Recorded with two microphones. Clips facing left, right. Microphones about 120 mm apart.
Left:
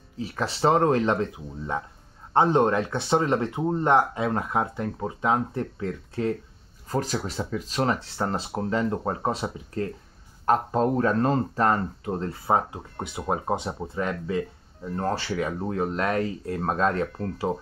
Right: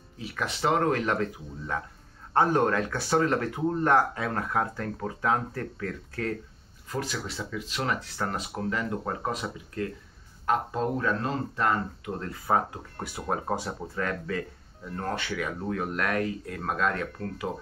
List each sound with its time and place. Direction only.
0.2 s speech: 35° left (ahead or behind)
6.9 s speech: 40° left (ahead or behind)